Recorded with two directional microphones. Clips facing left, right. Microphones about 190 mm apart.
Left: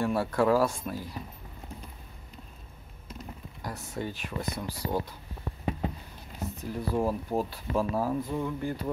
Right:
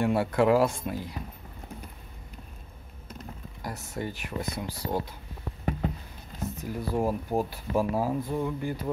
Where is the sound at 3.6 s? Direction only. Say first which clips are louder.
Right 1 dB; 10° right (ahead or behind).